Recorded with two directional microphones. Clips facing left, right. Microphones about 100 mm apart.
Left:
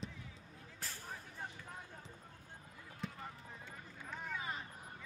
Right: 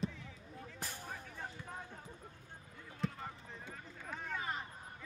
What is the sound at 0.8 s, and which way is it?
Vehicle, 20° right (ahead or behind).